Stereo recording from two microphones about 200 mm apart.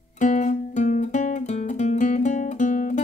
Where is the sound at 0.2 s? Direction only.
40° left (ahead or behind).